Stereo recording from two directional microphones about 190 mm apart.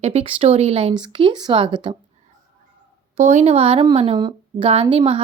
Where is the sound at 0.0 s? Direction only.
35° right (ahead or behind).